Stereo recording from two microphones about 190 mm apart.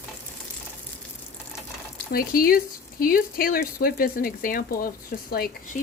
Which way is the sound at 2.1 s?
50° left (ahead or behind).